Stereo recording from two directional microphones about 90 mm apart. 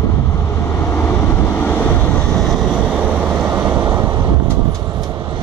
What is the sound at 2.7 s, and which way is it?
Vehicle, 10° right (ahead or behind).